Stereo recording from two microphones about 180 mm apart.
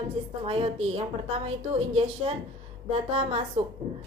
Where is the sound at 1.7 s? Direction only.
35° right (ahead or behind).